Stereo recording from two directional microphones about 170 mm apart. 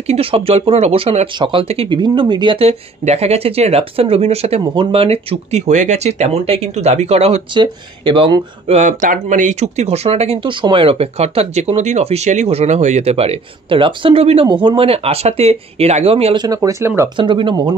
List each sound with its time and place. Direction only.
0.0 s speech: 35° right (ahead or behind)
16.4 s speech: 20° right (ahead or behind)
17.2 s speech: 30° right (ahead or behind)